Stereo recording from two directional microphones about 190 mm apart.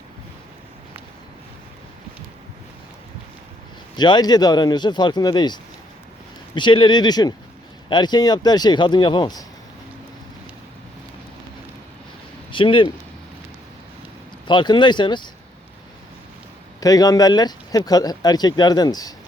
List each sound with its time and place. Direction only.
3.9 s speech: 25° left (ahead or behind)
12.5 s speech: 25° left (ahead or behind)
14.4 s speech: 25° left (ahead or behind)
16.8 s speech: 20° left (ahead or behind)